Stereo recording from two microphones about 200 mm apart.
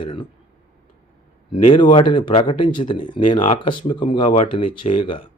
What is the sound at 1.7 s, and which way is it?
Speech, 25° left (ahead or behind).